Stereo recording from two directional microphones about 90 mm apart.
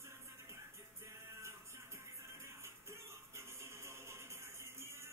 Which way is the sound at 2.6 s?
30° right (ahead or behind).